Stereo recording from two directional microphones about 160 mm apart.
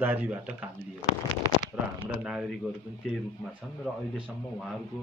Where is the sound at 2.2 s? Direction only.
5° right (ahead or behind).